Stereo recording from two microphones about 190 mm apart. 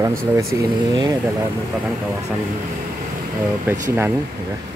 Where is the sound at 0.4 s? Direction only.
15° right (ahead or behind).